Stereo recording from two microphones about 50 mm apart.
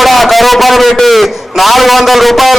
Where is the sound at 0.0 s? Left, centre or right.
Centre.